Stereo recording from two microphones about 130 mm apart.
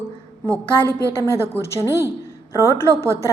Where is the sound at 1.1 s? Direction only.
20° left (ahead or behind).